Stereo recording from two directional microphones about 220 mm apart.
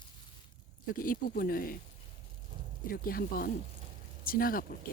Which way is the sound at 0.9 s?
40° left (ahead or behind).